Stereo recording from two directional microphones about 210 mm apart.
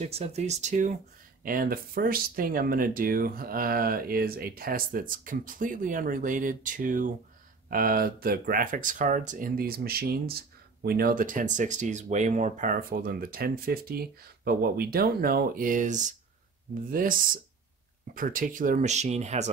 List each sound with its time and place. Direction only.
0.0 s speech: 30° right (ahead or behind)